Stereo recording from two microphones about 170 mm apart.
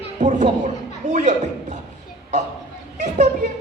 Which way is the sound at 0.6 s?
45° right (ahead or behind).